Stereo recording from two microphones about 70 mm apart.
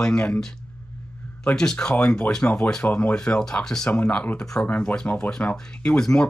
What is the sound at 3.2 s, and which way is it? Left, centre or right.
Speech, centre.